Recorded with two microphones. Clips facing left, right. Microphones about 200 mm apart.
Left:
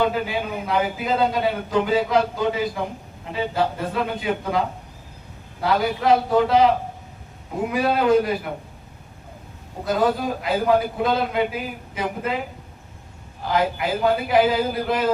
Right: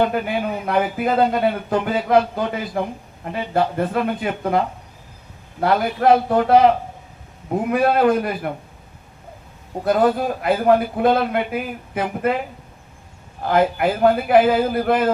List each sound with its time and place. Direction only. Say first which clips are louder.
0.0 s a man's voice: right 2 dB; 55° right (ahead or behind)
7.7 s a man's voice: right 2 dB; 55° right (ahead or behind)
9.8 s a man's voice: right 4 dB; 55° right (ahead or behind)
13.5 s a man's voice: right 4 dB; 55° right (ahead or behind)